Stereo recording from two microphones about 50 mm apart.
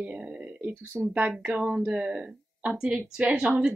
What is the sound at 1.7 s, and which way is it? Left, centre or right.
Speech, centre.